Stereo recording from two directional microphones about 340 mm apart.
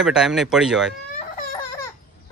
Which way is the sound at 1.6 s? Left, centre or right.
Centre.